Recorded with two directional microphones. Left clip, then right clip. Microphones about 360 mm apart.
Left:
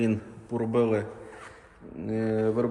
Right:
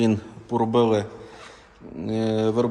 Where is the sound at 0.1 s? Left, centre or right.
Centre.